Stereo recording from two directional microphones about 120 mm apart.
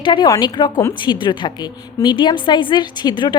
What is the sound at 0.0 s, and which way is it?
A woman's voice, 40° left (ahead or behind).